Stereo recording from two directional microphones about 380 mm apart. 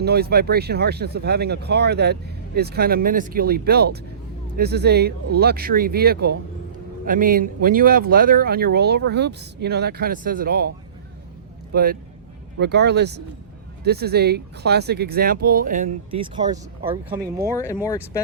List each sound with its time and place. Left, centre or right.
0.0 s speech: right
11.7 s speech: right
17.5 s speech: centre